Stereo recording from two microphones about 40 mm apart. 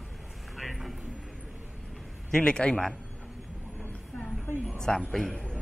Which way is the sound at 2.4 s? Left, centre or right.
Left.